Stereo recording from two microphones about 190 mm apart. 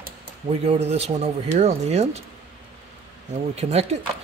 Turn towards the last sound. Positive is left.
turn(degrees=-35)  # may be behind; listen again after turning